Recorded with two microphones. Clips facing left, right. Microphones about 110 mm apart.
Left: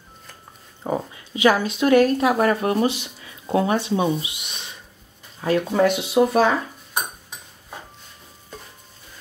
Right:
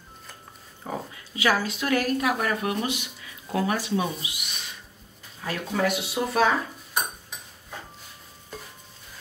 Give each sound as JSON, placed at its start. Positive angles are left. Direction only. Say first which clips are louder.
{"t": 0.8, "sound": "speech", "louder": "left 8 dB", "side_deg": 20}